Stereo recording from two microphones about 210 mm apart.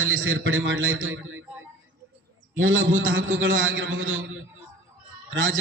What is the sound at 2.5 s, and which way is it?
A man's voice, 65° right (ahead or behind).